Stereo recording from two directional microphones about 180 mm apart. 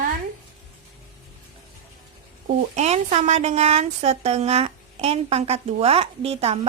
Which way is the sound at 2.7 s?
40° right (ahead or behind).